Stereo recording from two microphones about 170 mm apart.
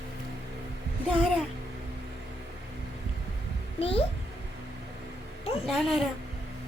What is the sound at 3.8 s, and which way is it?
Speech, 35° left (ahead or behind).